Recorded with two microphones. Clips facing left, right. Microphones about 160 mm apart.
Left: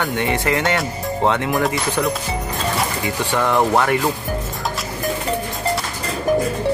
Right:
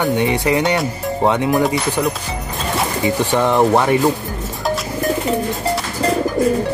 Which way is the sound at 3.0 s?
20° right (ahead or behind).